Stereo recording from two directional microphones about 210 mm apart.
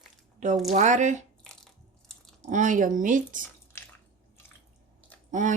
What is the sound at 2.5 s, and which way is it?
Speech, 40° right (ahead or behind).